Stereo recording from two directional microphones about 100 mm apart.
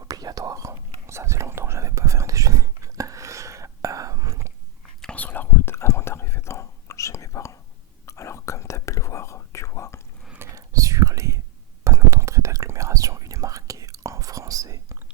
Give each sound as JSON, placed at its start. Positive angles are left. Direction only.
{"t": 0.0, "sound": "whispering", "side_deg": -40}
{"t": 5.0, "sound": "whispering", "side_deg": 15}
{"t": 10.3, "sound": "whispering", "side_deg": -30}